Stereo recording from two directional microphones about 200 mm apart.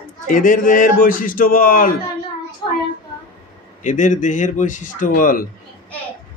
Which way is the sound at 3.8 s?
40° left (ahead or behind).